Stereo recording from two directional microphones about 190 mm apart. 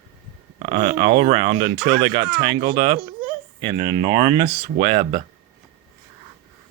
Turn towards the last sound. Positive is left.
turn(degrees=-25)  # may be behind; listen again after turning